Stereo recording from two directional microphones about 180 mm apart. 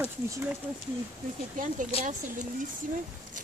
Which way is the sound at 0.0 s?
10° right (ahead or behind).